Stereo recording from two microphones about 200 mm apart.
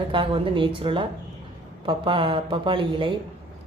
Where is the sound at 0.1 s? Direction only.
25° right (ahead or behind).